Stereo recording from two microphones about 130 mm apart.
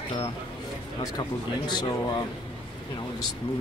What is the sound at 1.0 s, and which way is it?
Speech, 35° left (ahead or behind).